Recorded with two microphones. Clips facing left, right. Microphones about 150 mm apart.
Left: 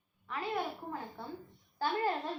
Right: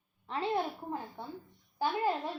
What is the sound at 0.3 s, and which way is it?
A child's voice, 30° right (ahead or behind).